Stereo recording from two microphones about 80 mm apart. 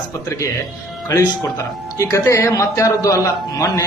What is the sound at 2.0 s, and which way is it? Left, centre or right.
A man's voice, left.